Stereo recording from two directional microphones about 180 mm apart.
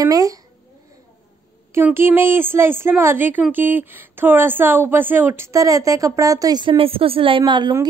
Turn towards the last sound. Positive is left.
turn(degrees=-25)  # may be behind; listen again after turning